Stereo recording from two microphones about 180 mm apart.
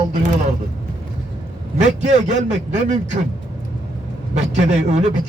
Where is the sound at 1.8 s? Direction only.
40° right (ahead or behind).